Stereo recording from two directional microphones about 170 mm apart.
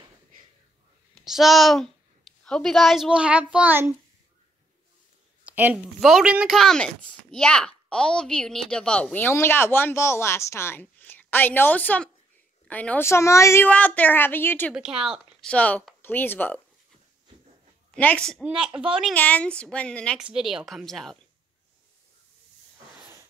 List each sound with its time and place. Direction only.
1.1 s a woman's voice: centre (ahead or behind)
5.4 s a sound: 10° right (ahead or behind)
5.9 s speech: centre (ahead or behind)
14.7 s speech: 5° right (ahead or behind)
15.5 s speech: 10° left (ahead or behind)
17.9 s speech: 5° left (ahead or behind)
18.7 s a woman's voice: 25° right (ahead or behind)
19.1 s a woman's voice: 10° left (ahead or behind)